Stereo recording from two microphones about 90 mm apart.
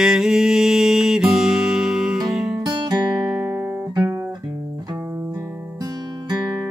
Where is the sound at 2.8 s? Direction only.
55° right (ahead or behind).